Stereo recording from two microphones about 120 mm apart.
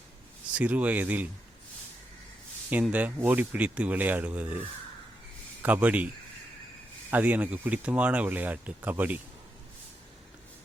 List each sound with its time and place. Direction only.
0.5 s speech: 10° right (ahead or behind)
2.9 s speech: 15° right (ahead or behind)
5.6 s speech: 15° right (ahead or behind)
7.1 s speech: 15° right (ahead or behind)